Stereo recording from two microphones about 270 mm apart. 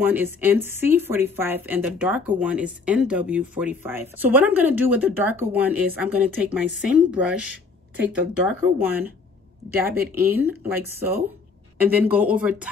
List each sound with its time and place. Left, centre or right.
0.0 s speech: centre
10.2 s speech: centre